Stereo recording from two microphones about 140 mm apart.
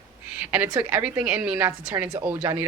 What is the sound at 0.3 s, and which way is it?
Speech, 10° right (ahead or behind).